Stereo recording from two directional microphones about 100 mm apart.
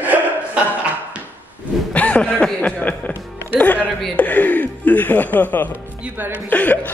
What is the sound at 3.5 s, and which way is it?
Music, 15° left (ahead or behind).